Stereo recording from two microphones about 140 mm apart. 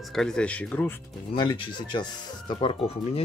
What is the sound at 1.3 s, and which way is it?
Speech, 35° left (ahead or behind).